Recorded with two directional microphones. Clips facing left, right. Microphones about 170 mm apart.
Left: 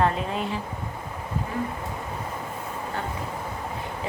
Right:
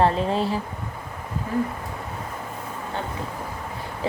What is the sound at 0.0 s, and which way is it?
Speech, 30° right (ahead or behind).